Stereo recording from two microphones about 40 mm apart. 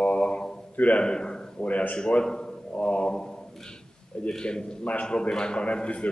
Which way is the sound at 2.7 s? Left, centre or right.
Left.